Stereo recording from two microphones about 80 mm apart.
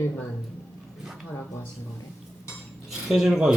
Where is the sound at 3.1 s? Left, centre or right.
Centre.